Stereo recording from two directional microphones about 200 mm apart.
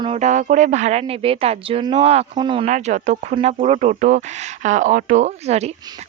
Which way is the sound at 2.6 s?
35° right (ahead or behind).